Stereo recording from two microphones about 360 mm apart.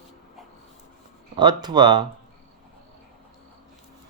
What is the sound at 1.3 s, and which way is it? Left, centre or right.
Speech, centre.